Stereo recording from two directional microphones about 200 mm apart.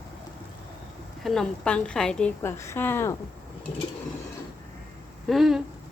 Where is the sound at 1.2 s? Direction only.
Centre (ahead or behind).